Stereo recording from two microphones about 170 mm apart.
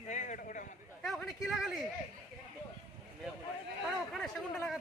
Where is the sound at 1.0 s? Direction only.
Centre (ahead or behind).